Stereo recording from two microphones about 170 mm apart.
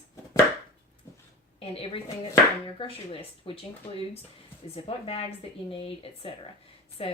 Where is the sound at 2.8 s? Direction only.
35° left (ahead or behind).